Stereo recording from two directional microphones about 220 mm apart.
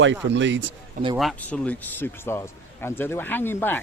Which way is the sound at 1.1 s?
Centre (ahead or behind).